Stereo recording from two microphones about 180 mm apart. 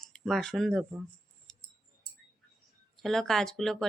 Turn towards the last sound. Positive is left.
turn(degrees=5)  # may be behind; listen again after turning